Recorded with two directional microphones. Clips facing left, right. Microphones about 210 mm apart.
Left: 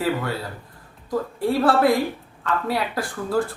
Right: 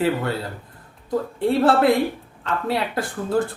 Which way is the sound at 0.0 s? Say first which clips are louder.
Right 2 dB; 25° right (ahead or behind).